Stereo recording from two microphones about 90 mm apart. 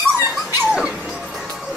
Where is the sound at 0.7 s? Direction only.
5° right (ahead or behind).